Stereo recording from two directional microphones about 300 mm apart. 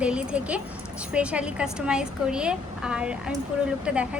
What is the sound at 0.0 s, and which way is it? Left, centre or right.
Speech, centre.